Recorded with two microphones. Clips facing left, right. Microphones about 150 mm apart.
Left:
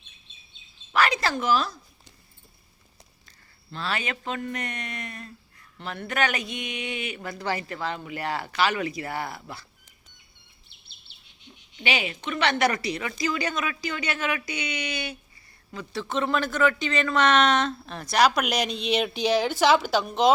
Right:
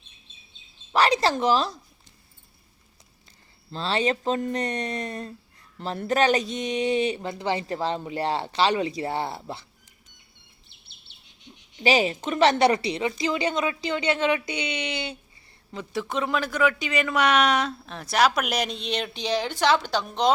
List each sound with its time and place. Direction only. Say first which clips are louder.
0.9 s speech: right 3 dB; 30° right (ahead or behind)
3.7 s a woman's voice: right 6 dB; 30° right (ahead or behind)
11.8 s a woman's voice: right 7 dB; 35° right (ahead or behind); by 20.3 s 5° left (ahead or behind)